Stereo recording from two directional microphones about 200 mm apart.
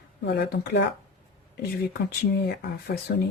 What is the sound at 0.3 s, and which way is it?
Speech, 55° left (ahead or behind).